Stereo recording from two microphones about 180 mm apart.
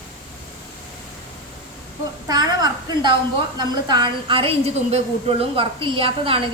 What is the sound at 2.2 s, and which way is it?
A woman's voice, 20° right (ahead or behind).